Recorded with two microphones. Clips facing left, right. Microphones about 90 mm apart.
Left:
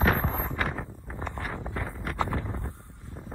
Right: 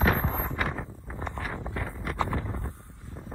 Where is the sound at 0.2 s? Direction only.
5° left (ahead or behind).